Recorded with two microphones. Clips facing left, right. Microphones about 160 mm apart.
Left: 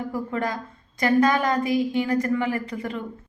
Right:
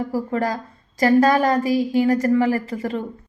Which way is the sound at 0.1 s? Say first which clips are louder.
Right 4 dB; 35° right (ahead or behind).